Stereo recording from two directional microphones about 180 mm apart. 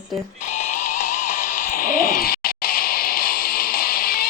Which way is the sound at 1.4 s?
50° left (ahead or behind).